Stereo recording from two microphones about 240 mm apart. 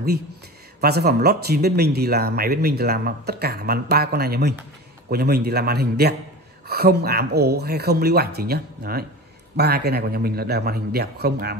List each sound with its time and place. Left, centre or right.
0.7 s speech: right